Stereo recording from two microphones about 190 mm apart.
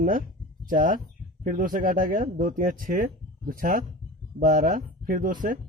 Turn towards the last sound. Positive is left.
turn(degrees=-45)  # may be behind; listen again after turning